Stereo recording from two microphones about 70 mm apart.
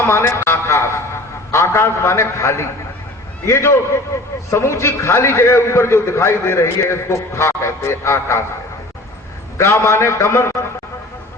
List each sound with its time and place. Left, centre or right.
0.0 s a man's voice: left
9.6 s a man's voice: left